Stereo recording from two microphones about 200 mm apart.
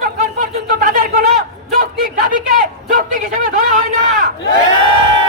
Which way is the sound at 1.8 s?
45° right (ahead or behind).